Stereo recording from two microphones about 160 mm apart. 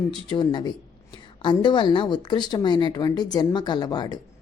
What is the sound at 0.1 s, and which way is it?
A woman's voice, 30° left (ahead or behind).